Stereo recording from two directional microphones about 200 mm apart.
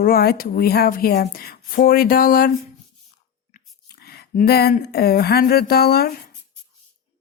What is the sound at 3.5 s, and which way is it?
Speech, 50° left (ahead or behind).